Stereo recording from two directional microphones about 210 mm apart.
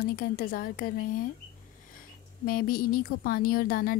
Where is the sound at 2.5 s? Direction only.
45° left (ahead or behind).